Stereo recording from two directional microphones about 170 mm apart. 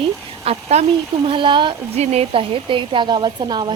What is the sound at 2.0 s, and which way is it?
A woman's voice, 40° right (ahead or behind).